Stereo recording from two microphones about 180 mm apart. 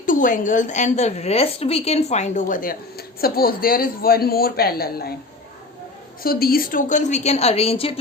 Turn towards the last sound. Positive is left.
turn(degrees=30)  # may be behind; listen again after turning